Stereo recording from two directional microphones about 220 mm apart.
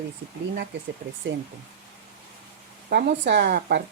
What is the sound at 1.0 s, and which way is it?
Speech, 40° right (ahead or behind).